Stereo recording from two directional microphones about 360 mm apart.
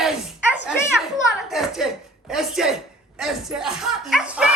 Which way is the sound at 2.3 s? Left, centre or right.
Centre.